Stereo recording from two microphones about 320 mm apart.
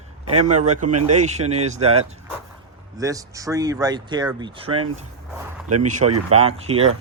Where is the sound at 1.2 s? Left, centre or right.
Right.